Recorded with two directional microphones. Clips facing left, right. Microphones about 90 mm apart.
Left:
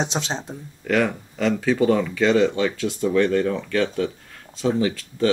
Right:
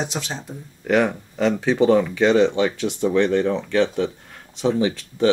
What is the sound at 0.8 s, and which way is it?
Speech, 20° right (ahead or behind).